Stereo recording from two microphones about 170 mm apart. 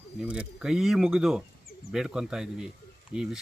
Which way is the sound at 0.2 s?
5° right (ahead or behind).